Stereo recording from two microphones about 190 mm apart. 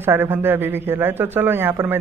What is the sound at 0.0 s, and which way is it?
A man's voice, 10° right (ahead or behind).